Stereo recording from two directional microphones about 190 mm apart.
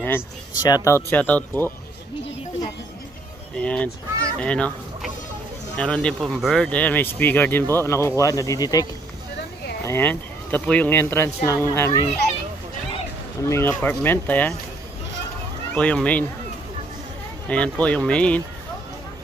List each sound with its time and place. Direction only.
0.0 s speech: 15° left (ahead or behind)
3.5 s speech: 5° left (ahead or behind)
5.8 s speech: 5° left (ahead or behind)
9.8 s speech: 10° left (ahead or behind)
13.5 s speech: 10° left (ahead or behind)
15.7 s speech: 5° left (ahead or behind)
17.5 s speech: 5° left (ahead or behind)